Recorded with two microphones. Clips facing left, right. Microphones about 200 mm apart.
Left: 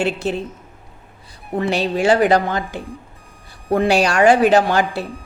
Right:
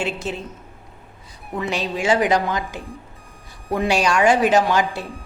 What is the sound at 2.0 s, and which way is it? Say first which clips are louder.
Speech: left 4 dB; 60° left (ahead or behind).